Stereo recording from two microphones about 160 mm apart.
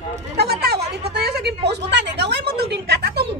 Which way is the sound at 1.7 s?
90° right.